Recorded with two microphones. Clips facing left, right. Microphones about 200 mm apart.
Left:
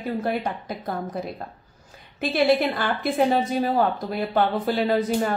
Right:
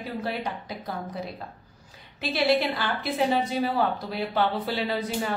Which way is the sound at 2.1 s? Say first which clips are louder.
Left 4 dB; 50° left (ahead or behind).